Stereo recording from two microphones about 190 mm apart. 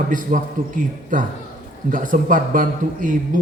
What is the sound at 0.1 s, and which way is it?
A man's voice, 45° right (ahead or behind).